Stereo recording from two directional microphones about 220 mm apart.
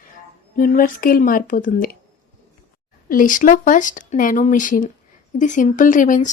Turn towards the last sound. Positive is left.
turn(degrees=35)  # may be behind; listen again after turning